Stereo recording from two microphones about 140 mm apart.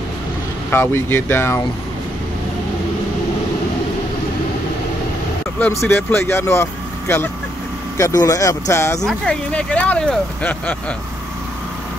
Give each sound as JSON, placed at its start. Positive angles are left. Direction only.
{"t": 0.7, "sound": "speech", "side_deg": 15}
{"t": 5.6, "sound": "speech", "side_deg": 15}
{"t": 9.0, "sound": "speech", "side_deg": 5}